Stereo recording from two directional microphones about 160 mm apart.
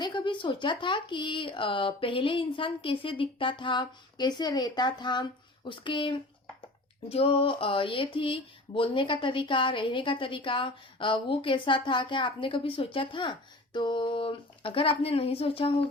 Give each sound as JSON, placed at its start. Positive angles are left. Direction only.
{"t": 0.0, "sound": "speech", "side_deg": 30}